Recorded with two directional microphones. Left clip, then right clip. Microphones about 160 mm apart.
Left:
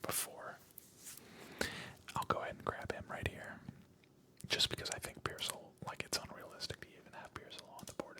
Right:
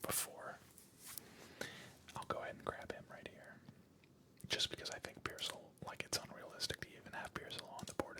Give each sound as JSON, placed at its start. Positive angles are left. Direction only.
{"t": 0.0, "sound": "whispering", "side_deg": 10}
{"t": 1.4, "sound": "whispering", "side_deg": 35}
{"t": 3.1, "sound": "whispering", "side_deg": 35}
{"t": 4.4, "sound": "whispering", "side_deg": 20}